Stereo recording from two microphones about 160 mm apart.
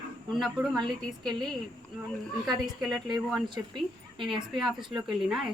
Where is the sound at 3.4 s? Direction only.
30° right (ahead or behind).